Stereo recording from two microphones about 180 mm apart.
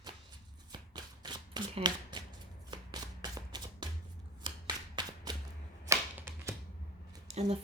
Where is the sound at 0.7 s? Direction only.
25° right (ahead or behind).